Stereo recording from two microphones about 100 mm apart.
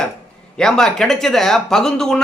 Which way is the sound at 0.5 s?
5° left (ahead or behind).